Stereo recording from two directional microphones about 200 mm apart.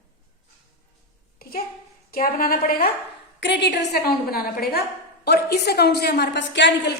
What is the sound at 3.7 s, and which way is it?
A woman's voice, 50° left (ahead or behind).